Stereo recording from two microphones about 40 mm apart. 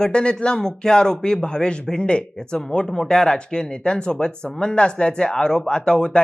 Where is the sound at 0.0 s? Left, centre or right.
Left.